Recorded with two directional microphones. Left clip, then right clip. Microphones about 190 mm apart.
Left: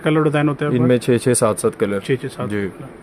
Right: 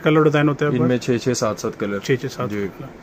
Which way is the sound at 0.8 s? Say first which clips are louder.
Left 4 dB; 55° left (ahead or behind).